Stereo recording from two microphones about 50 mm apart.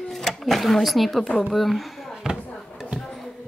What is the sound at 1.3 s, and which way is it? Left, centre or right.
Speech, centre.